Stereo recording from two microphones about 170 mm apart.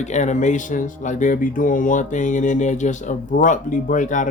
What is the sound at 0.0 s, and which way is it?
Speech, 45° left (ahead or behind).